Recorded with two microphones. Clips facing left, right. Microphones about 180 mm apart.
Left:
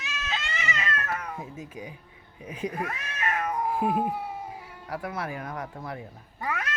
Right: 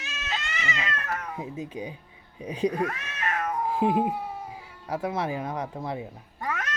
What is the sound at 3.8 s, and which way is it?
Speech, 25° right (ahead or behind).